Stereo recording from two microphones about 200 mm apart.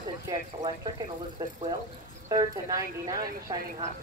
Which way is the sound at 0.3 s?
15° right (ahead or behind).